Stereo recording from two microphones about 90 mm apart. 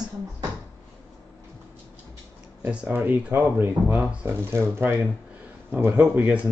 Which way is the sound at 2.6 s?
15° right (ahead or behind).